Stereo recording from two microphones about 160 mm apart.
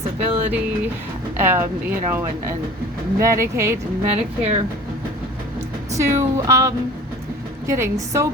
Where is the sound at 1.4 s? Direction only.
15° right (ahead or behind).